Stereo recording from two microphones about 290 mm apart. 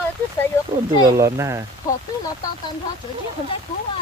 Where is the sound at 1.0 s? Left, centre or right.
Centre.